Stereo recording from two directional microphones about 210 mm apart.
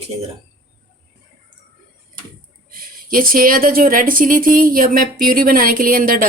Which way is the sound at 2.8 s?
40° right (ahead or behind).